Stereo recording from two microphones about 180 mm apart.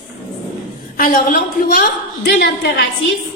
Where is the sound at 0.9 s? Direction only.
55° left (ahead or behind).